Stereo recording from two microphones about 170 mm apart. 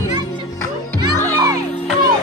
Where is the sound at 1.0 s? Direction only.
20° right (ahead or behind).